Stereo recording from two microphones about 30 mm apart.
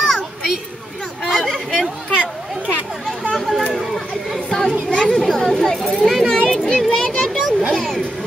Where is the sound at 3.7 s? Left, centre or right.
Centre.